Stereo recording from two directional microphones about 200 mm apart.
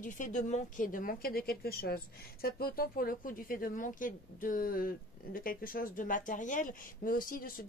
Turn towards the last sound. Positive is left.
turn(degrees=45)  # may be behind; listen again after turning